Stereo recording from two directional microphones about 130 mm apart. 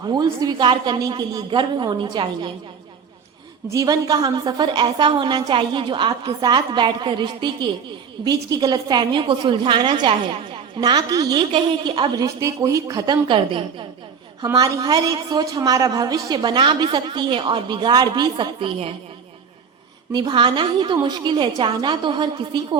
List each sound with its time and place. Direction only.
0.0 s a woman's voice: 30° right (ahead or behind)
3.7 s a woman's voice: 30° right (ahead or behind)
12.2 s a woman's voice: 25° right (ahead or behind)
14.4 s a woman's voice: 25° right (ahead or behind); by 18.9 s 45° right (ahead or behind)
20.1 s a woman's voice: 40° right (ahead or behind)